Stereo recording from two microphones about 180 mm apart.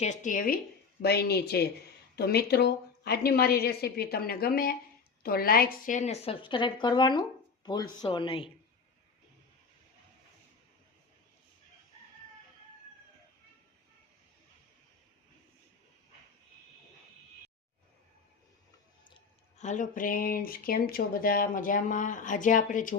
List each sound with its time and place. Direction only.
0.0 s speech: 40° left (ahead or behind)
1.0 s a woman's voice: 60° left (ahead or behind); by 8.4 s 30° left (ahead or behind)
19.5 s speech: 40° left (ahead or behind)